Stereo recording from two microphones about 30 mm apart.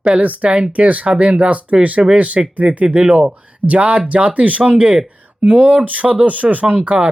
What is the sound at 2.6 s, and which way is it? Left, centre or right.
Speech, right.